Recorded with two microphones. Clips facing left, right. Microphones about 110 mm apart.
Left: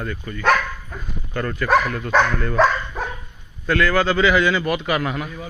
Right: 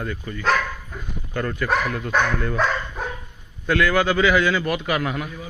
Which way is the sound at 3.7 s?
10° right (ahead or behind).